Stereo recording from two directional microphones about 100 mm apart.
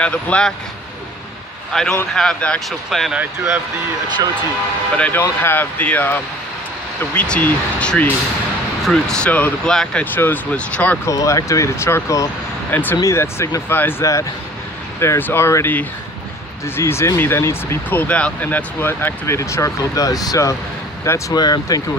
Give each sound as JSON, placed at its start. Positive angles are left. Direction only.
{"t": 0.0, "sound": "speech", "side_deg": 10}
{"t": 1.7, "sound": "speech", "side_deg": 5}
{"t": 3.2, "sound": "speech", "side_deg": -20}
{"t": 4.9, "sound": "speech", "side_deg": 10}
{"t": 11.1, "sound": "speech", "side_deg": 35}